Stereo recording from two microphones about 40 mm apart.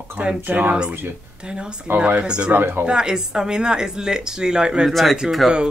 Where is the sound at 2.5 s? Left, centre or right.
Right.